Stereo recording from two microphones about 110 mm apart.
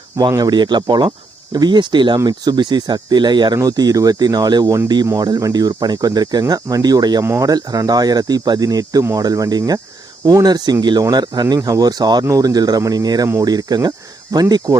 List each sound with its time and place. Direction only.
0.2 s speech: 35° right (ahead or behind)